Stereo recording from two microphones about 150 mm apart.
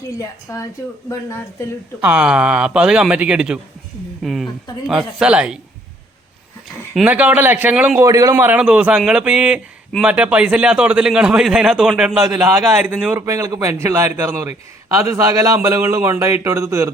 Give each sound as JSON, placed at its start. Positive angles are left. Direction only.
{"t": 0.5, "sound": "speech", "side_deg": 20}
{"t": 2.0, "sound": "a man's voice", "side_deg": -10}
{"t": 6.9, "sound": "a man's voice", "side_deg": -10}
{"t": 8.0, "sound": "a man's voice", "side_deg": -25}
{"t": 12.1, "sound": "a man's voice", "side_deg": -20}